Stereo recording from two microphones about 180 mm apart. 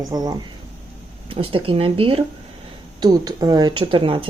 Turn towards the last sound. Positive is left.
turn(degrees=-30)  # may be behind; listen again after turning